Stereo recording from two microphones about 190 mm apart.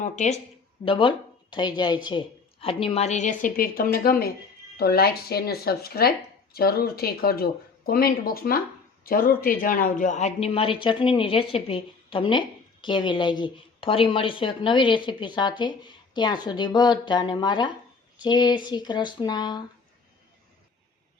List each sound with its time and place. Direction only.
0.0 s speech: 40° left (ahead or behind)
0.9 s speech: 25° left (ahead or behind)